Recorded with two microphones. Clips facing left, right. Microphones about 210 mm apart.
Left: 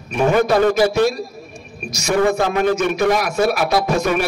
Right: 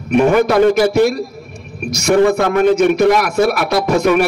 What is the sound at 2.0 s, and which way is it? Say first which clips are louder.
A man's voice: right 5 dB; 60° right (ahead or behind).